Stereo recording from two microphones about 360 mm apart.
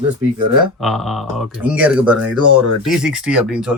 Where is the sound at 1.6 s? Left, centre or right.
Centre.